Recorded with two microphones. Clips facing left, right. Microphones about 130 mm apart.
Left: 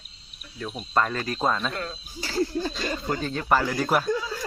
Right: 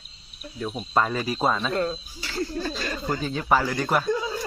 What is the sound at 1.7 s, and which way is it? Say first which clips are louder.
Speech: right 8 dB; 30° right (ahead or behind).